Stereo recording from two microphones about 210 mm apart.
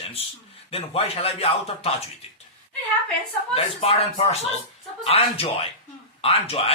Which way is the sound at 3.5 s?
30° left (ahead or behind).